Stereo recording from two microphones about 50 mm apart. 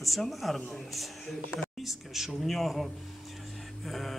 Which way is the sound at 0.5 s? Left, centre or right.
Centre.